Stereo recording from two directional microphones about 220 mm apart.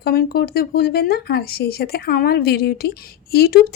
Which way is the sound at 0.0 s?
45° left (ahead or behind).